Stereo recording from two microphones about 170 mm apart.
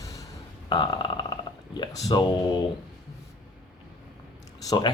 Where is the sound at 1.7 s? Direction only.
20° left (ahead or behind).